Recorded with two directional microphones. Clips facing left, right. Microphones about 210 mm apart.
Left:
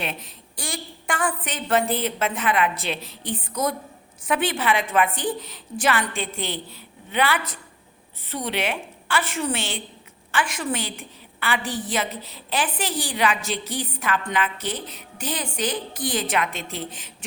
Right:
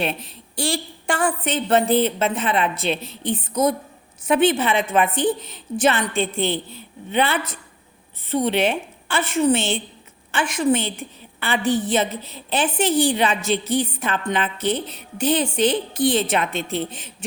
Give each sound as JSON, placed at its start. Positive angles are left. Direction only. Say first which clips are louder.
{"t": 0.0, "sound": "a woman's voice", "louder": "right 6 dB", "side_deg": -30}